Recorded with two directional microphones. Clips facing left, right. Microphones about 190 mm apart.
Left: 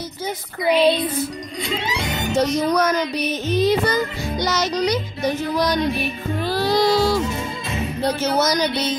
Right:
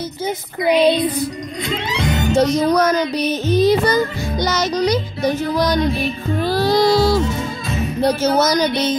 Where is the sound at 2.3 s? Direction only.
35° right (ahead or behind).